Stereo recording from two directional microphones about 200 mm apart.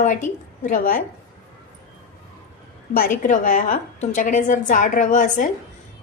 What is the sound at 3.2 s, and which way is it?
A woman's voice, 40° left (ahead or behind).